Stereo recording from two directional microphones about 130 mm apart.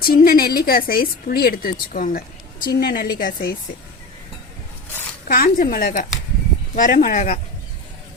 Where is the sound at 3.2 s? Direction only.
90° left.